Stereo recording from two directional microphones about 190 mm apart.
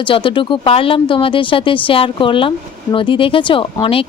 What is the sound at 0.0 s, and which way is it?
Speech, 25° left (ahead or behind).